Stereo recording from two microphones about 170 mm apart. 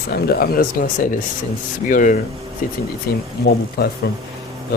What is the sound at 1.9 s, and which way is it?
Speech, 50° left (ahead or behind).